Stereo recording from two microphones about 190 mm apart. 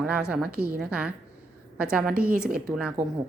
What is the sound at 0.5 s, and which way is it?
Speech, 55° right (ahead or behind).